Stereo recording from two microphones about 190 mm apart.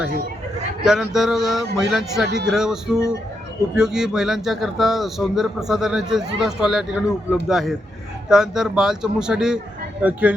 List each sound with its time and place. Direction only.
0.9 s a man's voice: centre (ahead or behind)
2.2 s speech: 60° right (ahead or behind)
2.5 s a man's voice: 5° right (ahead or behind)